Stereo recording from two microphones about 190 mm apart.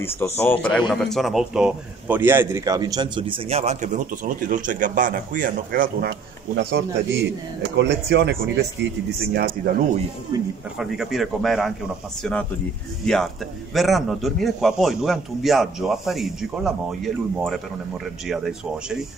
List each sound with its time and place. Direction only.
0.0 s speech: 10° left (ahead or behind); by 9.5 s 55° right (ahead or behind)
10.3 s speech: 20° right (ahead or behind)
10.8 s a man's voice: centre (ahead or behind)